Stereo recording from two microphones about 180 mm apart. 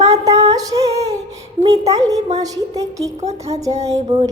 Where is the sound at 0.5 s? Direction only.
20° right (ahead or behind).